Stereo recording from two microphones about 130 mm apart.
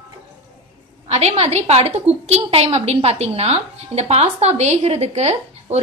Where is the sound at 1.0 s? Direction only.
55° right (ahead or behind).